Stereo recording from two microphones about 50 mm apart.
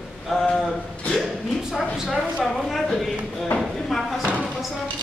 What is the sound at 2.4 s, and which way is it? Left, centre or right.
Speech, centre.